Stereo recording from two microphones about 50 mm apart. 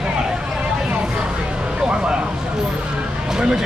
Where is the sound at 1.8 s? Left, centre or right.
Centre.